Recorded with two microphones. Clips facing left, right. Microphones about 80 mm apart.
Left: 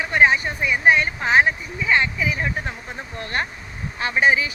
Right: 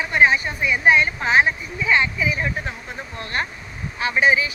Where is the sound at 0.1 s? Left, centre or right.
Left.